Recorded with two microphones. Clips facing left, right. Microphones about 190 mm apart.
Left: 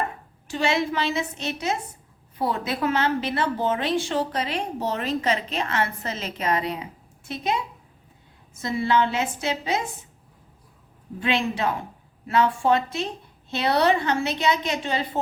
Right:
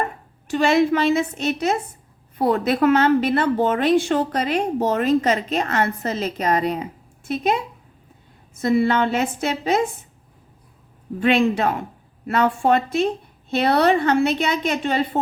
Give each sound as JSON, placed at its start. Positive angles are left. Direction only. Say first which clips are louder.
{"t": 0.4, "sound": "a woman's voice", "louder": "right 7 dB", "side_deg": -55}
{"t": 8.6, "sound": "a woman's voice", "louder": "right 5 dB", "side_deg": -55}
{"t": 11.2, "sound": "a woman's voice", "louder": "right 7 dB", "side_deg": -55}